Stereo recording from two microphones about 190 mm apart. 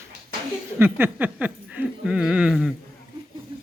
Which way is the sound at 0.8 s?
10° right (ahead or behind).